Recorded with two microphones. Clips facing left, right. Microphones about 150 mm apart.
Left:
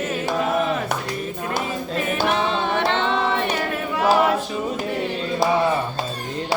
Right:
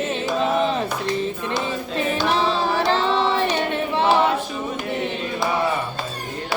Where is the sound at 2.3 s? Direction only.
35° right (ahead or behind).